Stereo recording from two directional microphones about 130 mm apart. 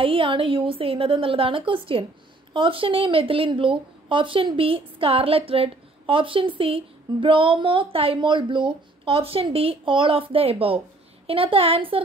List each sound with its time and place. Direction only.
0.0 s speech: 45° right (ahead or behind)